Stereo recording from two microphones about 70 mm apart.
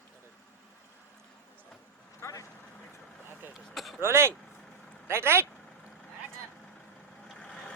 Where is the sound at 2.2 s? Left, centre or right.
Left.